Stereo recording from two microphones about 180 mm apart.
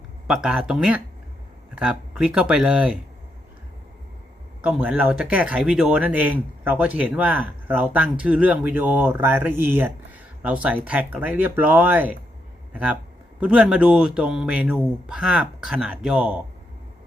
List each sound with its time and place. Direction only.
0.3 s a man's voice: 5° right (ahead or behind)
4.6 s speech: 5° right (ahead or behind)
13.4 s a man's voice: 5° right (ahead or behind)